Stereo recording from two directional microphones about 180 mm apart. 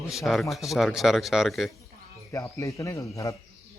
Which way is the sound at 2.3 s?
15° left (ahead or behind).